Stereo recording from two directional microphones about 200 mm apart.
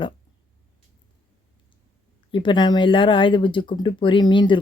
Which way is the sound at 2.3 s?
25° left (ahead or behind).